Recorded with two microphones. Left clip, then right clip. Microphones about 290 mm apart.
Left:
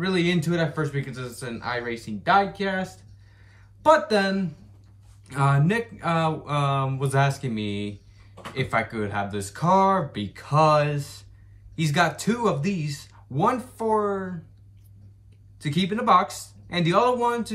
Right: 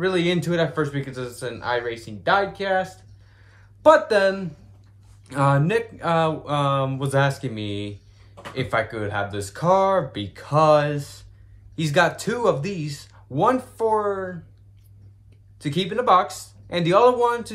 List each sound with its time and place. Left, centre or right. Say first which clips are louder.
0.0 s a man's voice: right 3 dB; centre
15.6 s a man's voice: right 3 dB; centre